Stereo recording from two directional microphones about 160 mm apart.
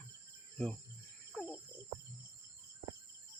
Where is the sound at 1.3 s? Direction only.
5° left (ahead or behind).